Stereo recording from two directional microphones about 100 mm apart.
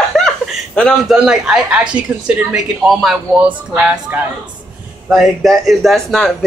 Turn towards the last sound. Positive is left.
turn(degrees=5)  # may be behind; listen again after turning